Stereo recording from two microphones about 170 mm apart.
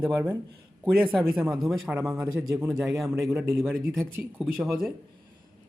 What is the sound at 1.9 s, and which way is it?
Speech, 20° right (ahead or behind).